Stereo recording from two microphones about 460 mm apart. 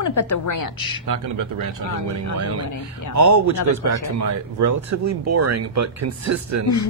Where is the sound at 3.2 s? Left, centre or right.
Right.